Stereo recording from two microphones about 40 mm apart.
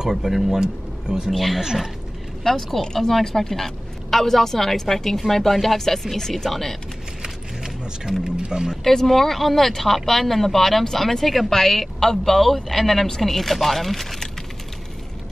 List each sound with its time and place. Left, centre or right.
0.0 s speech: centre
0.6 s speech: centre
1.3 s speech: centre
1.6 s speech: centre
2.4 s a woman's voice: centre
7.2 s a sound: centre
8.2 s speech: centre
8.8 s speech: centre